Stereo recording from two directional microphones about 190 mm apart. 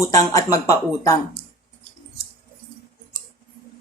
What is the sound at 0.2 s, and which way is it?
Speech, 15° left (ahead or behind).